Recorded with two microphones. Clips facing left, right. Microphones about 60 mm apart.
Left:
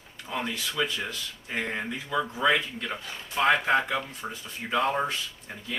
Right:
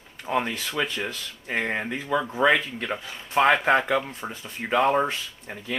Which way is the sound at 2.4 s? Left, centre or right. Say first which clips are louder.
Right 4 dB; right.